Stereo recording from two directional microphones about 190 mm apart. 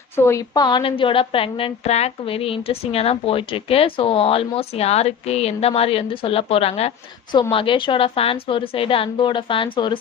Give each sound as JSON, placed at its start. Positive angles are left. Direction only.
{"t": 0.1, "sound": "a woman's voice", "side_deg": 15}